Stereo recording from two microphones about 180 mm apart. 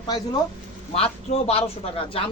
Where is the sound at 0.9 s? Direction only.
35° left (ahead or behind).